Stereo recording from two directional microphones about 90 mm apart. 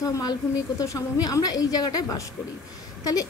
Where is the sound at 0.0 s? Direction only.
45° left (ahead or behind).